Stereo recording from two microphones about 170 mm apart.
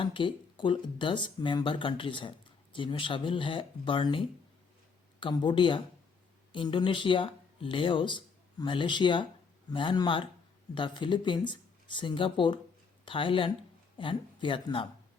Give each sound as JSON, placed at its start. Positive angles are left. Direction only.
{"t": 0.0, "sound": "speech", "side_deg": 30}
{"t": 5.2, "sound": "speech", "side_deg": 25}